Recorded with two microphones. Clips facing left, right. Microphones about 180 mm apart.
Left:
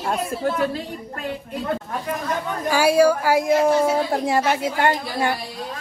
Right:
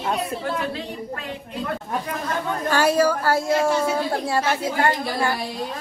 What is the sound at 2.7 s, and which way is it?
A woman's voice, 10° left (ahead or behind).